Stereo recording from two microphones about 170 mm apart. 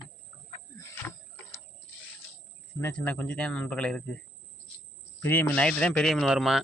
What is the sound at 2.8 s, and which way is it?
Speech, 10° left (ahead or behind).